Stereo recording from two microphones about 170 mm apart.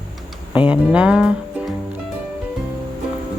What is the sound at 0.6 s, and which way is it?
Speech, 5° right (ahead or behind).